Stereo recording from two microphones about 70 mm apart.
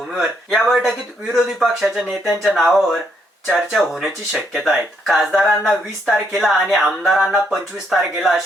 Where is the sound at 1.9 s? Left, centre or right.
Right.